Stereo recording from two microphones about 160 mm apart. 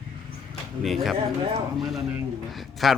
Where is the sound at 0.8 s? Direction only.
Centre (ahead or behind).